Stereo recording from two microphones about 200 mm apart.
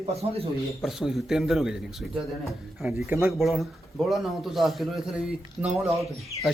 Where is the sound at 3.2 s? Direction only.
Centre (ahead or behind).